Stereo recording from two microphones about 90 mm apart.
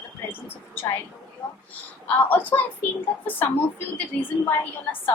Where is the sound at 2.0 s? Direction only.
20° left (ahead or behind).